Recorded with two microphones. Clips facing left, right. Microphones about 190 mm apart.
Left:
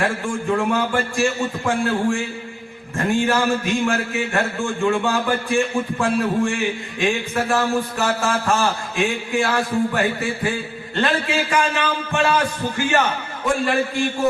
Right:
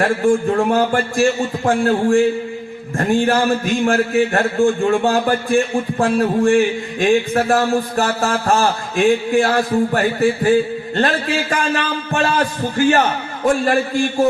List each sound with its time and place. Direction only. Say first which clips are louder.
0.0 s a man's voice: right 8 dB; 40° right (ahead or behind)